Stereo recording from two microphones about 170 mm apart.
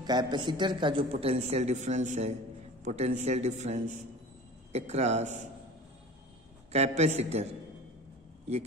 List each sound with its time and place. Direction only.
0.0 s a man's voice: 25° right (ahead or behind); by 5.4 s 40° right (ahead or behind)
6.7 s a man's voice: 40° right (ahead or behind)